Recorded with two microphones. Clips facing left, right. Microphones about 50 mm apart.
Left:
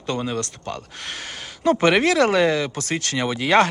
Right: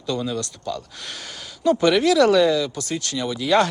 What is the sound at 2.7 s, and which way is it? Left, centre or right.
Speech, left.